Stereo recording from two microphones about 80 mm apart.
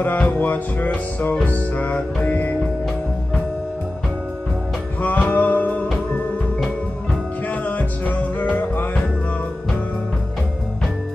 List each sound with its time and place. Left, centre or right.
0.0 s music: left
5.0 s music: centre
7.6 s music: centre